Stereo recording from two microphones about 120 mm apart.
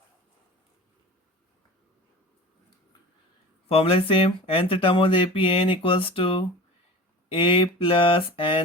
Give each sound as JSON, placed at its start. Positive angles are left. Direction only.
{"t": 3.7, "sound": "speech", "side_deg": 50}